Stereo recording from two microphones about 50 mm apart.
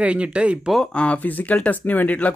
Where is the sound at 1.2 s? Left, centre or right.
Left.